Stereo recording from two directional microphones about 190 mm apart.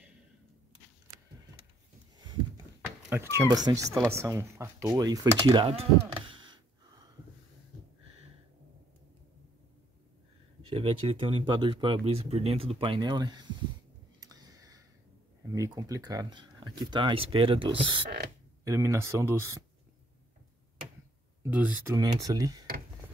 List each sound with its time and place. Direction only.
2.1 s a sound: 20° right (ahead or behind)
3.1 s speech: 15° right (ahead or behind)
10.7 s speech: 30° right (ahead or behind)
14.2 s a sound: 20° right (ahead or behind)
15.5 s speech: 20° right (ahead or behind)
18.6 s speech: 15° right (ahead or behind)
21.4 s speech: 10° right (ahead or behind)
21.9 s speech: 20° right (ahead or behind)